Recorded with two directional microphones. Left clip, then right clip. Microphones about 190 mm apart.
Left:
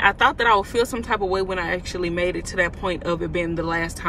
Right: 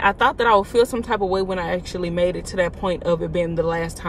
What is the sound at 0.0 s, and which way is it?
Speech, 25° right (ahead or behind).